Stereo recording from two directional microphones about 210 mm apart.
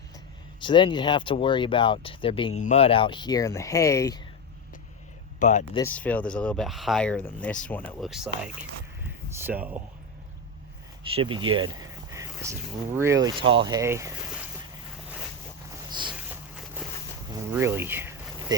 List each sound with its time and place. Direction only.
0.6 s speech: 20° left (ahead or behind)
5.4 s speech: 35° left (ahead or behind)
5.7 s speech: 10° left (ahead or behind)
9.4 s speech: 10° right (ahead or behind)
11.1 s speech: 25° right (ahead or behind)
15.9 s boat: 20° right (ahead or behind)
16.1 s a sound: 5° right (ahead or behind)
17.3 s speech: 10° right (ahead or behind)